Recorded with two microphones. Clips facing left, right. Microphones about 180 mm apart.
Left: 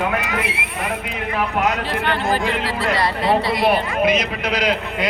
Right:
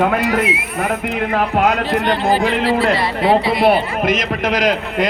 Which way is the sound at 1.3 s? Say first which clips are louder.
Right 4 dB; 55° right (ahead or behind).